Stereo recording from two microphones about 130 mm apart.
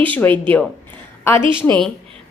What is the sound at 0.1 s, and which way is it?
A woman's voice, 15° left (ahead or behind).